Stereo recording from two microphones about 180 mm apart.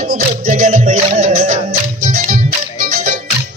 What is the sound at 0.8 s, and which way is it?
Music, 40° right (ahead or behind).